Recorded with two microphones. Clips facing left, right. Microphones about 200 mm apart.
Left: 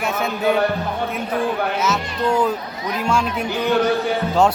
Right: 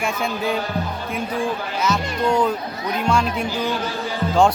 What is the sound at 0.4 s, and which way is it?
Music, 65° left (ahead or behind).